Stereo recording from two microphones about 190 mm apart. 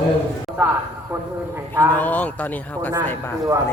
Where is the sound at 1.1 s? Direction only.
10° right (ahead or behind).